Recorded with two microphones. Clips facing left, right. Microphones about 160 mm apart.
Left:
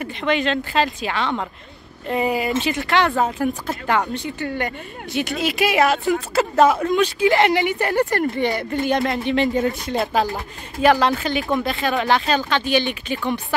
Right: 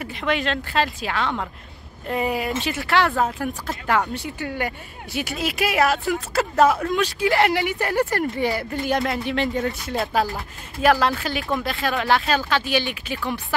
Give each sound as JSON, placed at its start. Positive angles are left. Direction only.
{"t": 0.0, "sound": "speech", "side_deg": -5}